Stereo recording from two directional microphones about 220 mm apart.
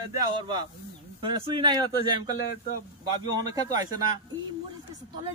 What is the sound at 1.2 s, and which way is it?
Speech, 25° right (ahead or behind).